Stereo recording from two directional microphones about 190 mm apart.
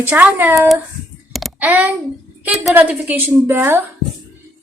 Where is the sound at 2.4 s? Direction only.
Centre (ahead or behind).